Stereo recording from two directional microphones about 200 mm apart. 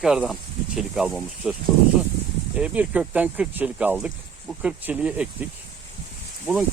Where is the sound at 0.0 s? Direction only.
Centre (ahead or behind).